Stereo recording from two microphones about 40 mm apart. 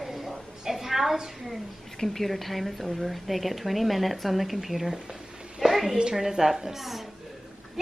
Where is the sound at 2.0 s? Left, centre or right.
Centre.